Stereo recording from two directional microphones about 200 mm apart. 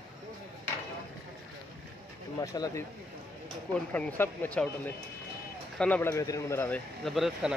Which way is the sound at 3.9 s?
10° left (ahead or behind).